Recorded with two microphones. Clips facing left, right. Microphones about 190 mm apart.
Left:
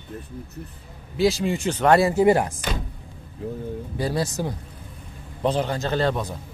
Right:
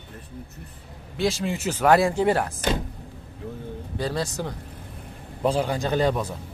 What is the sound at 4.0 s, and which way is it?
Speech, 10° left (ahead or behind).